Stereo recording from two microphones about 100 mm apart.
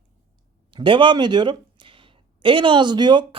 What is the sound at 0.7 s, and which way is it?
Speech, 55° right (ahead or behind).